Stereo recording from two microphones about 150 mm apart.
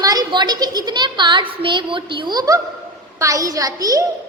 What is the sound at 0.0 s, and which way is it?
A woman's voice, 25° right (ahead or behind).